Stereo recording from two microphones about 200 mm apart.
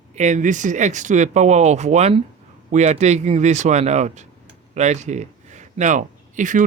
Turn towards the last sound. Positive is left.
turn(degrees=-40)  # may be behind; listen again after turning